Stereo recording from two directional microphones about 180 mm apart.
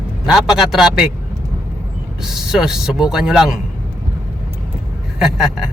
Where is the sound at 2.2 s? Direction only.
5° right (ahead or behind).